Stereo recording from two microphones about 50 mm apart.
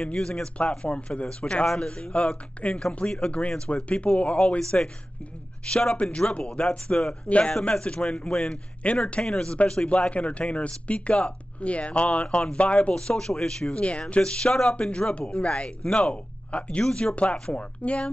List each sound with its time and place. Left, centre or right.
0.0 s a man's voice: centre
4.6 s a man's voice: centre